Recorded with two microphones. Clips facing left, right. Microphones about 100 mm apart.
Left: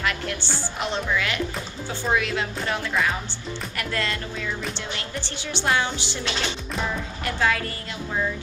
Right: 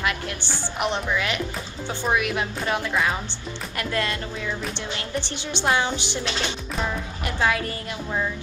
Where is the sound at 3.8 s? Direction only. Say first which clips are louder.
Right 2 dB; 20° right (ahead or behind).